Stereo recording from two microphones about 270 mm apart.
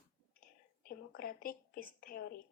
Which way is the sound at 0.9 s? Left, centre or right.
Left.